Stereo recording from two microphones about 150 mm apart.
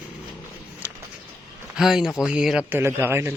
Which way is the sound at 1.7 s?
5° right (ahead or behind).